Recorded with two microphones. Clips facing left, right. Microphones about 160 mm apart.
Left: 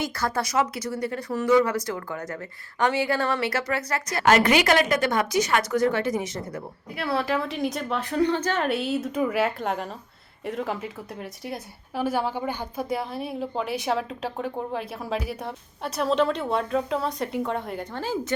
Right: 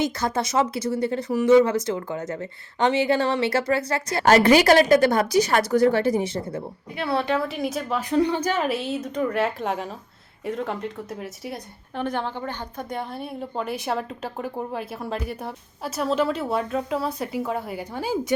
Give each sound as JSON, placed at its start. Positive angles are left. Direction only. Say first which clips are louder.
{"t": 0.0, "sound": "a woman's voice", "louder": "right 3 dB", "side_deg": -20}
{"t": 6.9, "sound": "speech", "louder": "right 2 dB", "side_deg": 0}
{"t": 8.1, "sound": "speech", "louder": "right 2 dB", "side_deg": -10}